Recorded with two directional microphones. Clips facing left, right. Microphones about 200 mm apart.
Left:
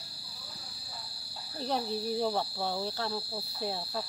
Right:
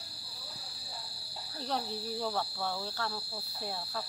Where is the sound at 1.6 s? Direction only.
20° left (ahead or behind).